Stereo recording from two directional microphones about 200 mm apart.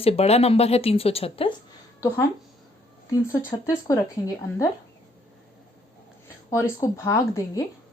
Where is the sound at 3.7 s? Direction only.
15° left (ahead or behind).